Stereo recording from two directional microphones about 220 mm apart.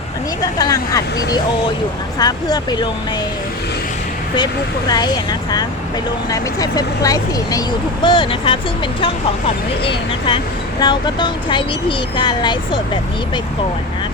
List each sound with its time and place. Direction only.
0.6 s speech: 15° left (ahead or behind)
4.9 s speech: 20° left (ahead or behind)
9.8 s speech: 25° left (ahead or behind)